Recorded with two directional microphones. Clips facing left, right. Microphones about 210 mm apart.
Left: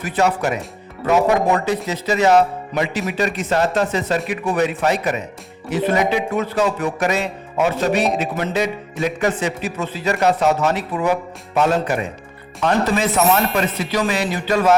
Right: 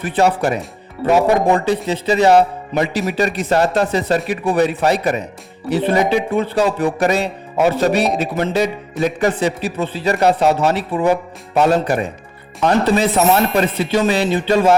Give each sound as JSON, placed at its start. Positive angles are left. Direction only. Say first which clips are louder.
{"t": 0.0, "sound": "speech", "louder": "right 3 dB", "side_deg": -30}